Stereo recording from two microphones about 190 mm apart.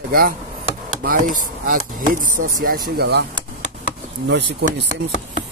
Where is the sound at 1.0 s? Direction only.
45° right (ahead or behind).